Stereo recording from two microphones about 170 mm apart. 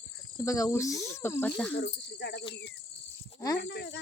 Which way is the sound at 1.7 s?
85° left.